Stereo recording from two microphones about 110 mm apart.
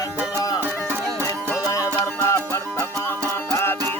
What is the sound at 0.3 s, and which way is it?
Music, 35° left (ahead or behind).